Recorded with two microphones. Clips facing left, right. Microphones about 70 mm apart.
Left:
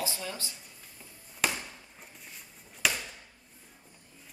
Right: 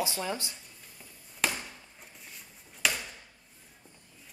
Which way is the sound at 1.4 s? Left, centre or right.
Centre.